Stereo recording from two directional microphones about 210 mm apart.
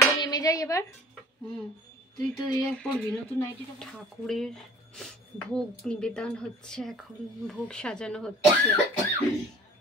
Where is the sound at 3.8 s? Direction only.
Centre (ahead or behind).